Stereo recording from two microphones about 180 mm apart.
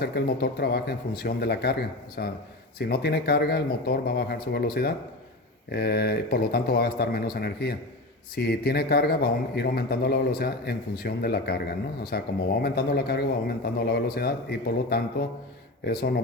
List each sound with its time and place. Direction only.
0.0 s a man's voice: 65° left (ahead or behind)